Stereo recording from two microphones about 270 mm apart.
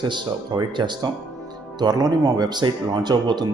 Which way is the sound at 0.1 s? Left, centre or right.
Centre.